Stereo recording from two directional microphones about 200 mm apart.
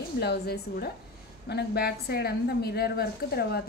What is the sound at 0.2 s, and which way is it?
A woman's voice, 55° left (ahead or behind).